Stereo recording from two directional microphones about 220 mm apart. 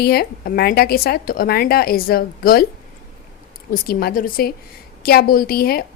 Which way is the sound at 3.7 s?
45° left (ahead or behind).